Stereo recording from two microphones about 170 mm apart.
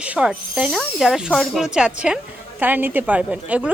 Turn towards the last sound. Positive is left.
turn(degrees=-10)  # may be behind; listen again after turning